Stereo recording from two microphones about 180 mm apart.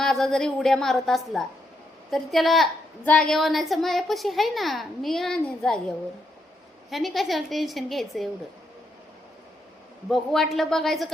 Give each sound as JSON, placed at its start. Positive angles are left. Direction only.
{"t": 0.0, "sound": "a woman's voice", "side_deg": 0}
{"t": 6.9, "sound": "a woman's voice", "side_deg": 0}
{"t": 10.1, "sound": "a woman's voice", "side_deg": 0}